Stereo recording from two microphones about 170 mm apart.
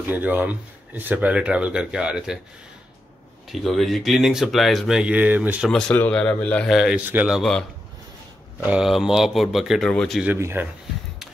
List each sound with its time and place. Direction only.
0.0 s speech: 10° right (ahead or behind)
3.6 s speech: centre (ahead or behind)
5.7 s speech: 5° left (ahead or behind)
10.2 s speech: 15° right (ahead or behind)